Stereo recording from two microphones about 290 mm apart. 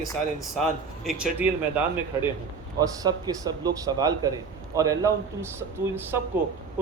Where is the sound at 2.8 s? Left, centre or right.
Centre.